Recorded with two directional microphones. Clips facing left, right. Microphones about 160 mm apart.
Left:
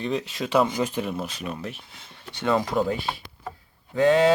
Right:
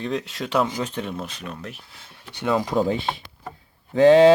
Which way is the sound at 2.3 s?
10° right (ahead or behind).